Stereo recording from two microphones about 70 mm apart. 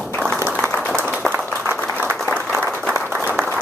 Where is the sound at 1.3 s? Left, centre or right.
Right.